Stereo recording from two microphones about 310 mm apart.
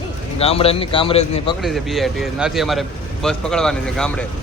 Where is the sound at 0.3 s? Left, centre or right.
Centre.